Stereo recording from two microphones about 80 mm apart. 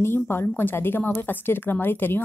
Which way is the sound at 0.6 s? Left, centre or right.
Left.